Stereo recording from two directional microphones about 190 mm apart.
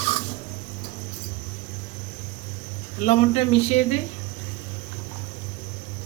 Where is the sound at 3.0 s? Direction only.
35° left (ahead or behind).